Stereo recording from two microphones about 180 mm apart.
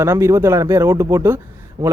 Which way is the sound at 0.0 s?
15° right (ahead or behind).